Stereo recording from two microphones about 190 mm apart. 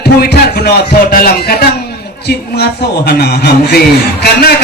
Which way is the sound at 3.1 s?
55° left (ahead or behind).